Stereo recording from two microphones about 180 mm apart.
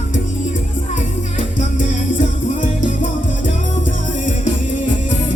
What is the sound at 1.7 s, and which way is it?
Music, 45° left (ahead or behind).